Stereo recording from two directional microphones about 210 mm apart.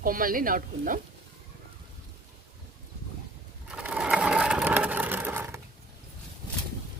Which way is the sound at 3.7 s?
5° right (ahead or behind).